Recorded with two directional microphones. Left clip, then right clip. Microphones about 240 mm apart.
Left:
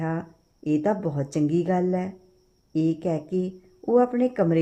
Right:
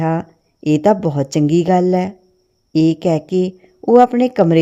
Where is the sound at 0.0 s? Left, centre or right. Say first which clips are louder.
Right 11 dB; right.